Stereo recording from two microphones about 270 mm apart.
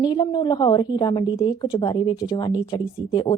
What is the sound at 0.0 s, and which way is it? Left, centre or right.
A woman's voice, centre.